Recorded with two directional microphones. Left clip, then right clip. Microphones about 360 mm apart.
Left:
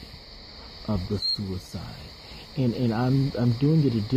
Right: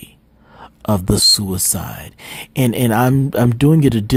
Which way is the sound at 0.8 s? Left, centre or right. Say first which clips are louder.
Right 14 dB; right.